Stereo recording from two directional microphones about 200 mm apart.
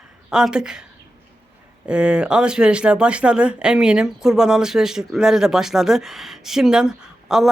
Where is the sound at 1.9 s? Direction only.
5° right (ahead or behind).